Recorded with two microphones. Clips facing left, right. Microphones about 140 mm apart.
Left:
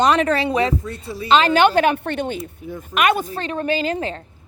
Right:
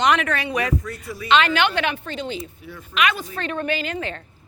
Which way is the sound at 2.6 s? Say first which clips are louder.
Left 7 dB; 40° left (ahead or behind).